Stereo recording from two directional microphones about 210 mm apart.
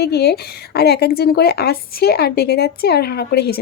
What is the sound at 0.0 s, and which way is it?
A woman's voice, 50° left (ahead or behind).